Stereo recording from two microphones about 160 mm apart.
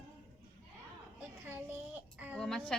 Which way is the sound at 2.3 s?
5° left (ahead or behind).